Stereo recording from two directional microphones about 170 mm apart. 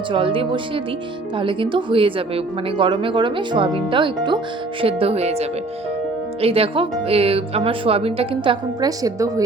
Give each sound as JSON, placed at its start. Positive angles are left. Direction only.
{"t": 0.1, "sound": "speech", "side_deg": -30}